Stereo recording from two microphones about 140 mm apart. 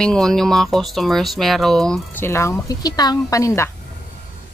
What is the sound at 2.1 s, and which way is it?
A woman's voice, 20° left (ahead or behind).